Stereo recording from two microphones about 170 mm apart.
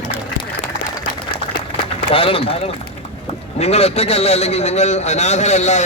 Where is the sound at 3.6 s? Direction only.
40° left (ahead or behind).